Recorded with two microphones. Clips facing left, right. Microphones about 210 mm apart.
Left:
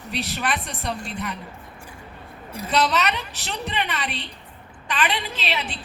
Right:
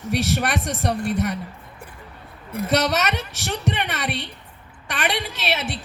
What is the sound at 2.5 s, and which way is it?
A woman's voice, 50° right (ahead or behind).